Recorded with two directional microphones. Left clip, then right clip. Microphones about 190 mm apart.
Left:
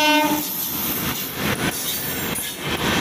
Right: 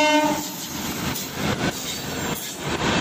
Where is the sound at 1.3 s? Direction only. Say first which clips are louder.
Left 2 dB; 45° right (ahead or behind).